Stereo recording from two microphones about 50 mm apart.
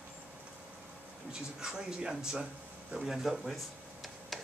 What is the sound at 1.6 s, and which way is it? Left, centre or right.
Speech, centre.